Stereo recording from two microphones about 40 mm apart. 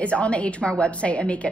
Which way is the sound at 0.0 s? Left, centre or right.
Left.